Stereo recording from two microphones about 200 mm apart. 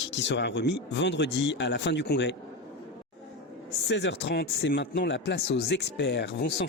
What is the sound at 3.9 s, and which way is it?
Speech, 60° left (ahead or behind).